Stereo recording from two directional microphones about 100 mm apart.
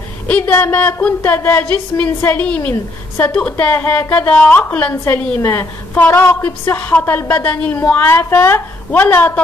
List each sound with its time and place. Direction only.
0.3 s a woman's voice: 20° left (ahead or behind)